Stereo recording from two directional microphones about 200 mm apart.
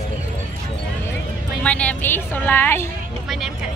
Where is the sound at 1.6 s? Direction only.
5° left (ahead or behind).